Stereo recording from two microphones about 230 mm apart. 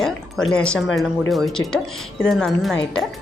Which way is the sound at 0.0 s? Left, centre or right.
Centre.